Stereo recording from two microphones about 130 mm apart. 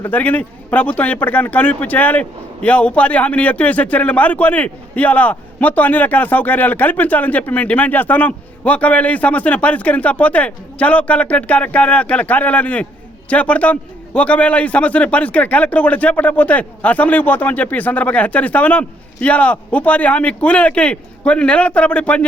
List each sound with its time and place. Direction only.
0.0 s speech: 10° left (ahead or behind)